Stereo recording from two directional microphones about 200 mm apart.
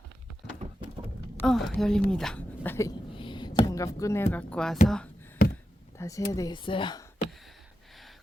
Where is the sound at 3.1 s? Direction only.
25° left (ahead or behind); by 5.4 s 5° left (ahead or behind).